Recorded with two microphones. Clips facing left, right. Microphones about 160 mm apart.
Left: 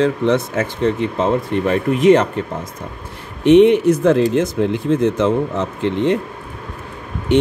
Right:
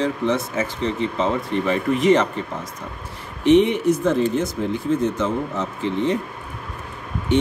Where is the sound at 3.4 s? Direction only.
65° left (ahead or behind).